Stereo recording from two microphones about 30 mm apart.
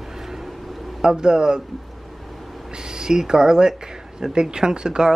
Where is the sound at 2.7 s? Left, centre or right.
Right.